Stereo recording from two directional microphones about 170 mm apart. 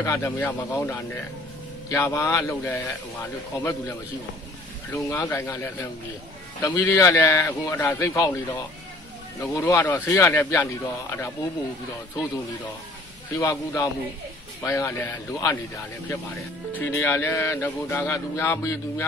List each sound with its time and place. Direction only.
0.0 s speech: 15° left (ahead or behind)
4.9 s speech: 15° left (ahead or behind)
9.4 s speech: 10° left (ahead or behind)
13.4 s speech: 15° left (ahead or behind)
16.7 s speech: 10° left (ahead or behind)